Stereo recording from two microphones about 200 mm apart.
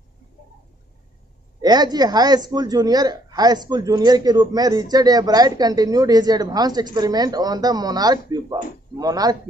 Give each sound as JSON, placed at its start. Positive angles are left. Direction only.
{"t": 1.6, "sound": "a woman's voice", "side_deg": -20}